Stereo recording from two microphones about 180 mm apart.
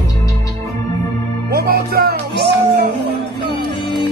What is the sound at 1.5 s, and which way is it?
Music, 60° right (ahead or behind).